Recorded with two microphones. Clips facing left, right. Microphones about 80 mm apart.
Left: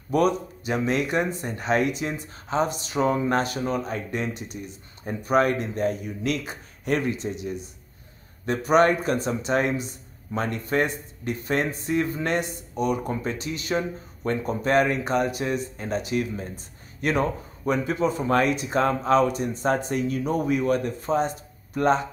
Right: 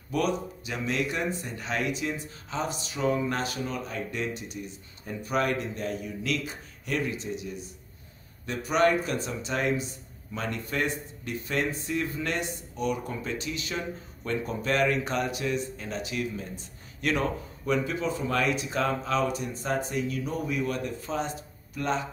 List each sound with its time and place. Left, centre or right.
0.7 s speech: left
6.4 s speech: left